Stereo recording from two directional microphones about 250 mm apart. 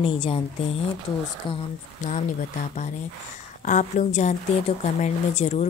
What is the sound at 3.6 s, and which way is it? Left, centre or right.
Speech, left.